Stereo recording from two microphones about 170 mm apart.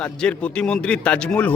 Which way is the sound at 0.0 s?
5° left (ahead or behind).